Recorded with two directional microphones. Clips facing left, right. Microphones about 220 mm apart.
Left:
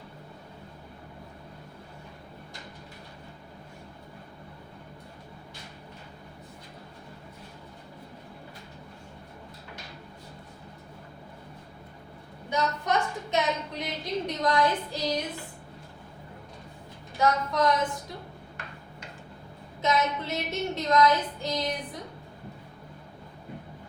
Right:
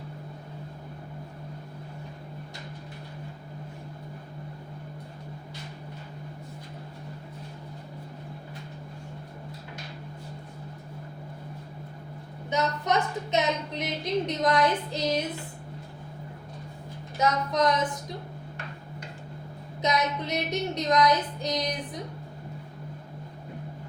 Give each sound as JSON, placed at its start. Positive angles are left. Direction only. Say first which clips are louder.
{"t": 12.5, "sound": "a woman's voice", "louder": "right 1 dB", "side_deg": -20}
{"t": 17.2, "sound": "a woman's voice", "louder": "even", "side_deg": -20}
{"t": 19.8, "sound": "a woman's voice", "louder": "even", "side_deg": -20}